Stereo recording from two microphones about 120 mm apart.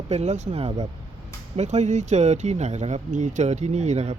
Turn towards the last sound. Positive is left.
turn(degrees=-65)  # may be behind; listen again after turning